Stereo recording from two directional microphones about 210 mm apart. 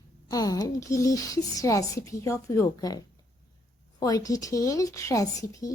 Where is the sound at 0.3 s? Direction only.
15° left (ahead or behind).